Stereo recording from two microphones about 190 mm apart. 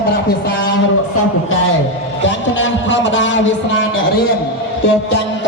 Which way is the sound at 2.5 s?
75° left (ahead or behind).